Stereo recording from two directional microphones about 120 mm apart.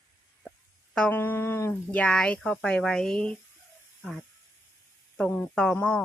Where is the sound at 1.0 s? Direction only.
15° left (ahead or behind).